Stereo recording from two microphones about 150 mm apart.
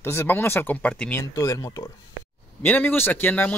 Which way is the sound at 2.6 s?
10° left (ahead or behind).